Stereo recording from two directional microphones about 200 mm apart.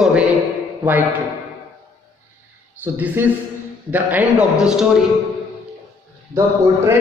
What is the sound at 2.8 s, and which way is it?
A man's voice, 10° right (ahead or behind).